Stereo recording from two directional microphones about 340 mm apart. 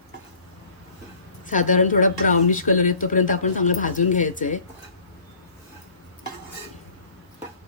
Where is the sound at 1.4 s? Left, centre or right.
Left.